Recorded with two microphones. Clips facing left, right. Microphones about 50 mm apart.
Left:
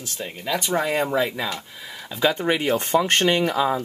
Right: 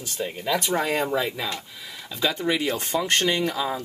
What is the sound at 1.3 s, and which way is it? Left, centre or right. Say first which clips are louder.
Speech: left 2 dB; centre.